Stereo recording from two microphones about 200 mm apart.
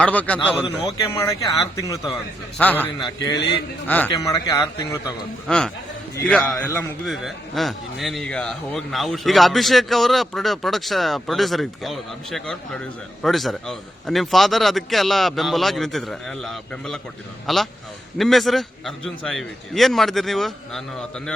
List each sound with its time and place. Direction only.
0.0 s a man's voice: 5° left (ahead or behind)
1.1 s speech: 15° left (ahead or behind)
3.3 s a man's voice: 55° left (ahead or behind)
3.8 s speech: 10° left (ahead or behind)
5.5 s a man's voice: 5° left (ahead or behind)
7.0 s a man's voice: centre (ahead or behind)